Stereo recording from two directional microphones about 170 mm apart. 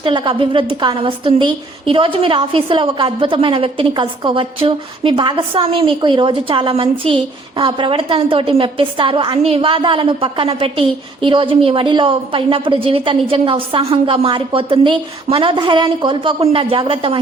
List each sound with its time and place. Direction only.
0.0 s a woman's voice: 30° right (ahead or behind)